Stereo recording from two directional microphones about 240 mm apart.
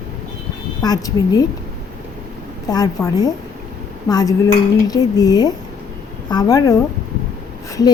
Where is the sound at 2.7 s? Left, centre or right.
Centre.